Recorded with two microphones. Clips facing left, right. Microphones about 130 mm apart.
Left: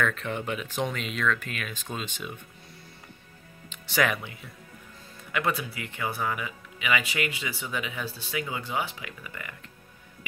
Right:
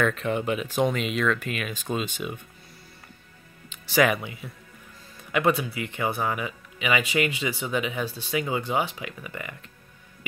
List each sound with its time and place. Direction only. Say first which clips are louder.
0.0 s speech: right 4 dB; 10° right (ahead or behind)
3.7 s speech: right 5 dB; 5° right (ahead or behind)
5.6 s speech: right 5 dB; 20° right (ahead or behind)